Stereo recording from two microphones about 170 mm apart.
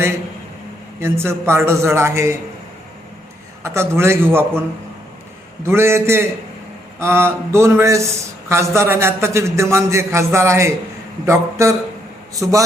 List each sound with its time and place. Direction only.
1.0 s a man's voice: 15° right (ahead or behind)
3.6 s a man's voice: 15° right (ahead or behind)
5.6 s a man's voice: 15° right (ahead or behind)